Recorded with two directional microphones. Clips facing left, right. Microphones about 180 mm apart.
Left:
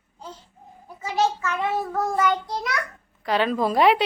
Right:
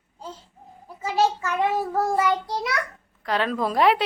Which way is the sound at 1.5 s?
10° right (ahead or behind).